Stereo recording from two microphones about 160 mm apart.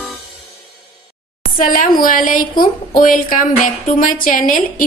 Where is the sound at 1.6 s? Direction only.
60° left (ahead or behind).